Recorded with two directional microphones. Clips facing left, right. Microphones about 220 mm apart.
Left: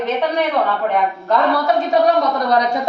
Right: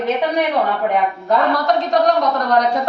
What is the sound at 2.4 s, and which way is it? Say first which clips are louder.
Speech: even; 10° left (ahead or behind).